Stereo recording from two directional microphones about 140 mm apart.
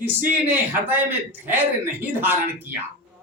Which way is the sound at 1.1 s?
15° right (ahead or behind).